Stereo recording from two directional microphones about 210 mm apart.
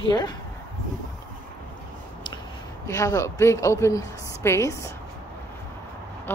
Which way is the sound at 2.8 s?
15° left (ahead or behind).